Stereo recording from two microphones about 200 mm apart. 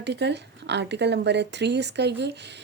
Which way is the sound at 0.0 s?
60° right (ahead or behind).